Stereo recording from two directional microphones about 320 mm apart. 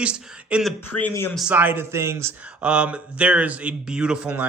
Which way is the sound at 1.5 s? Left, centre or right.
Centre.